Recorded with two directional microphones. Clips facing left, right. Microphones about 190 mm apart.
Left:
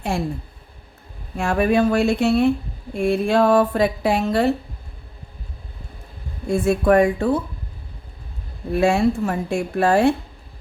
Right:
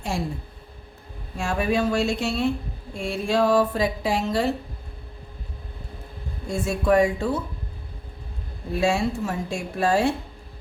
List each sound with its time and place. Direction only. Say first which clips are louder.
0.1 s speech: left 3 dB; 60° left (ahead or behind)
1.4 s speech: left 5 dB; 60° left (ahead or behind)
6.5 s speech: left 5 dB; 55° left (ahead or behind)
8.8 s speech: left 5 dB; 55° left (ahead or behind)